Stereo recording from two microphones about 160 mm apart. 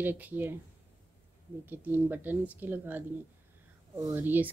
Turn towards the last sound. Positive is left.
turn(degrees=-10)  # may be behind; listen again after turning